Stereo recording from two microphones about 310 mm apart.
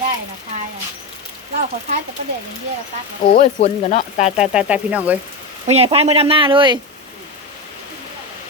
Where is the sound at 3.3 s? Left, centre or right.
Left.